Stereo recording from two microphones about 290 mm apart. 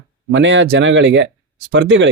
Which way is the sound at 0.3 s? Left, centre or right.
Right.